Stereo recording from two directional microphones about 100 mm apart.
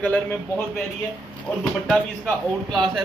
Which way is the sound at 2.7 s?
Centre (ahead or behind).